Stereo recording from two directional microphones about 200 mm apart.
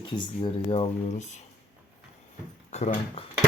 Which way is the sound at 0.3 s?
25° left (ahead or behind).